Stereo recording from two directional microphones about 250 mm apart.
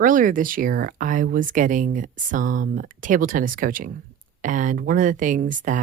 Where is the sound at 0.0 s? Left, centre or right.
Right.